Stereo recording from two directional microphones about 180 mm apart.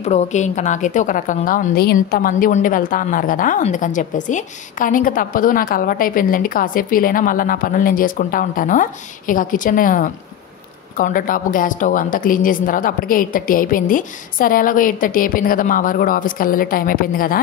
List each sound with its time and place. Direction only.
0.0 s a woman's voice: 40° left (ahead or behind)